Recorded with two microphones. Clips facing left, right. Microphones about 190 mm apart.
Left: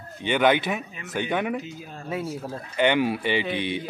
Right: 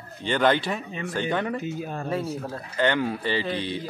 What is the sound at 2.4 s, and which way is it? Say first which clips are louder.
Speech: left 5 dB; 15° left (ahead or behind).